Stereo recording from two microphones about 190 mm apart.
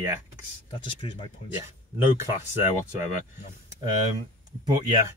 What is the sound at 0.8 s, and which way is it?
Speech, 25° left (ahead or behind).